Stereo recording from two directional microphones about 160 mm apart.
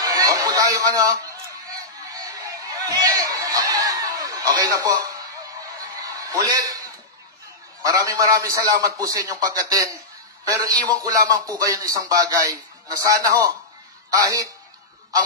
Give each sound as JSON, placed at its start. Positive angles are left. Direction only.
{"t": 0.0, "sound": "chatter", "side_deg": -20}
{"t": 2.1, "sound": "a sound", "side_deg": -20}
{"t": 7.8, "sound": "a man's voice", "side_deg": -20}